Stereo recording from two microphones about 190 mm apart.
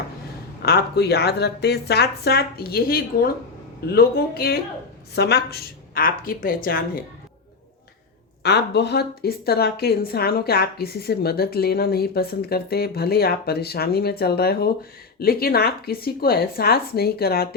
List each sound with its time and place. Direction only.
0.6 s a woman's voice: 55° left (ahead or behind)
8.4 s a woman's voice: 60° left (ahead or behind)